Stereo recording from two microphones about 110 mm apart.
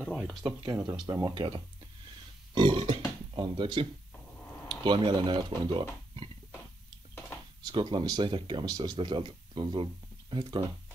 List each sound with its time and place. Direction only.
0.2 s speech: centre (ahead or behind)
1.0 s speech: 30° right (ahead or behind)
1.3 s speech: 55° right (ahead or behind)
2.5 s burping: 50° right (ahead or behind)
3.3 s speech: 50° right (ahead or behind)
7.6 s speech: 45° right (ahead or behind)